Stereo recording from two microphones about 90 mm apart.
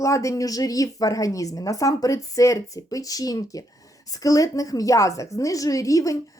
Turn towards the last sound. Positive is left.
turn(degrees=40)  # may be behind; listen again after turning